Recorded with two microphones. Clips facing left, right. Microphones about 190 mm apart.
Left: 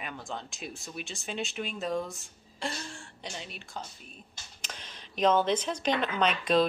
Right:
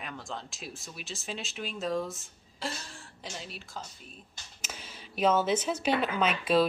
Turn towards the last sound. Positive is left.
turn(degrees=-5)  # may be behind; listen again after turning